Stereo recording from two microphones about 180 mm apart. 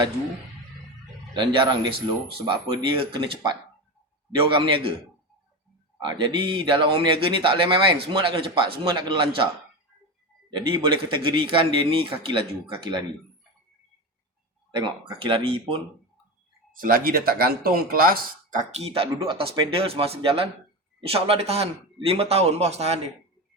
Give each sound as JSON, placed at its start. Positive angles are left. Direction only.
{"t": 1.3, "sound": "speech", "side_deg": -25}
{"t": 6.0, "sound": "speech", "side_deg": -25}
{"t": 10.5, "sound": "speech", "side_deg": -25}
{"t": 14.7, "sound": "speech", "side_deg": -25}
{"t": 16.7, "sound": "a man's voice", "side_deg": -50}